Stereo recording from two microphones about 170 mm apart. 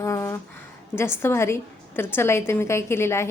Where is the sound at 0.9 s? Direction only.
15° left (ahead or behind).